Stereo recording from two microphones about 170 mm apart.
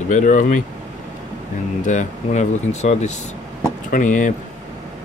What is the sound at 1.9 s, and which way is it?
Speech, 45° left (ahead or behind).